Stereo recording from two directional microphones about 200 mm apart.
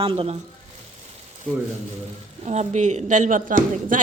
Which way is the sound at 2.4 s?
35° right (ahead or behind).